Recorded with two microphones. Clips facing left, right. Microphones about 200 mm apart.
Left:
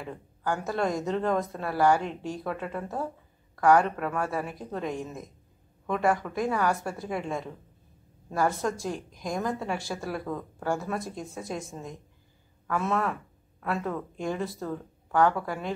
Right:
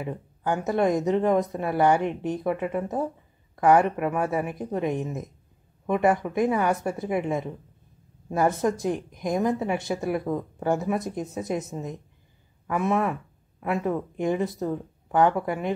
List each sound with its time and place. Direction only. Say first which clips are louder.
0.0 s speech: right 4 dB; 20° right (ahead or behind)